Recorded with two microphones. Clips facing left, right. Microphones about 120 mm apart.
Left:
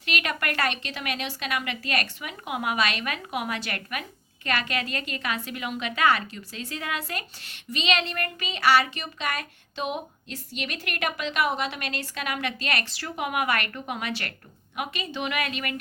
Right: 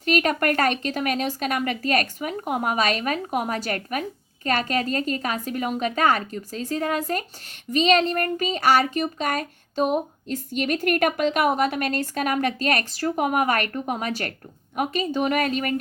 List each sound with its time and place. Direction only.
0.0 s speech: 40° right (ahead or behind)